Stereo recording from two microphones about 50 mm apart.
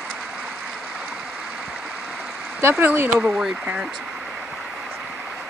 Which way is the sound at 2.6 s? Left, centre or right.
Right.